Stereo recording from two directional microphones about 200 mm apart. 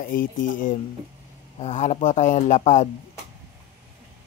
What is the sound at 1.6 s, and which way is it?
A man's voice, 35° left (ahead or behind).